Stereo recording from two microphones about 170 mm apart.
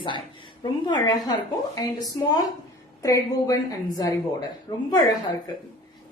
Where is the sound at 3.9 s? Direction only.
20° left (ahead or behind).